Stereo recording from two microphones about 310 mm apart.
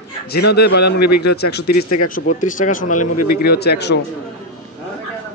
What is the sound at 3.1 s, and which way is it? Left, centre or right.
Speech, left.